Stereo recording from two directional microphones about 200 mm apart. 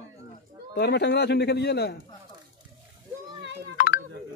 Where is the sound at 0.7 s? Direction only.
55° left (ahead or behind).